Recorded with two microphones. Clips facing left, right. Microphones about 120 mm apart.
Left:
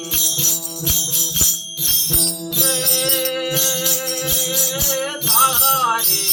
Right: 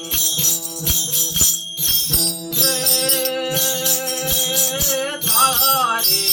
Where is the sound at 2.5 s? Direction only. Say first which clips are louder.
Even; 5° left (ahead or behind).